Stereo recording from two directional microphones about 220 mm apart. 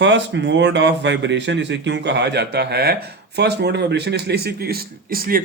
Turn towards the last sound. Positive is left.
turn(degrees=-40)  # may be behind; listen again after turning